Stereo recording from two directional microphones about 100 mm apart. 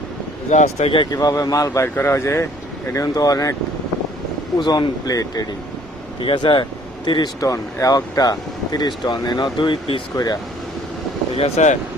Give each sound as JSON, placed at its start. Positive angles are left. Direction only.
{"t": 0.6, "sound": "speech", "side_deg": 90}
{"t": 1.1, "sound": "speech", "side_deg": 40}
{"t": 4.5, "sound": "speech", "side_deg": 45}
{"t": 6.2, "sound": "speech", "side_deg": 50}
{"t": 7.4, "sound": "speech", "side_deg": 35}
{"t": 11.3, "sound": "speech", "side_deg": 90}